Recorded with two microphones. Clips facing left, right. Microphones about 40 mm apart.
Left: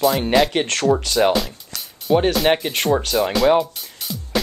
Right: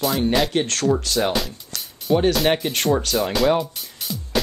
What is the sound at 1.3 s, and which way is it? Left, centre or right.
Music, centre.